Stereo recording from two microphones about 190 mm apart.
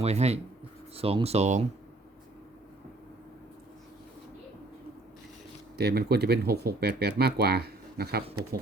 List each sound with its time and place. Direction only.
0.0 s speech: 35° right (ahead or behind)
5.7 s speech: 55° right (ahead or behind)